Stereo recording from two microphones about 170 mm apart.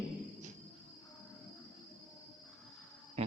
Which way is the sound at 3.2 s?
40° right (ahead or behind).